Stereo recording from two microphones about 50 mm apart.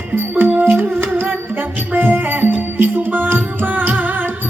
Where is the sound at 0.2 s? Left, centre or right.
Right.